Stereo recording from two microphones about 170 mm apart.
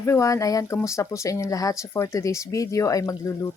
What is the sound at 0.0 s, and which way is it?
Speech, 20° left (ahead or behind).